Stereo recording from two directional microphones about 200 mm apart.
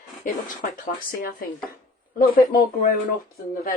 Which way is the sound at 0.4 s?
45° left (ahead or behind).